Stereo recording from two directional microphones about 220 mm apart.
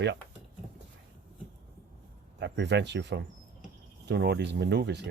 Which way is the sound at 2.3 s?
50° right (ahead or behind).